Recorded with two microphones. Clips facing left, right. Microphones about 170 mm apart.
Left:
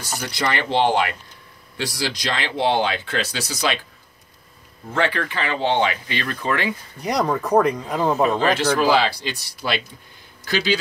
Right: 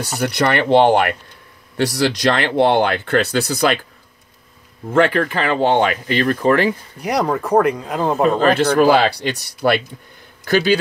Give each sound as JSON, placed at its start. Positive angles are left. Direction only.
{"t": 0.2, "sound": "speech", "side_deg": -60}
{"t": 4.9, "sound": "speech", "side_deg": -45}
{"t": 7.0, "sound": "speech", "side_deg": -10}
{"t": 8.2, "sound": "speech", "side_deg": -50}